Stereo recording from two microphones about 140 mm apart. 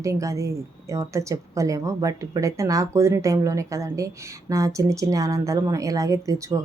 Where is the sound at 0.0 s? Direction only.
20° right (ahead or behind).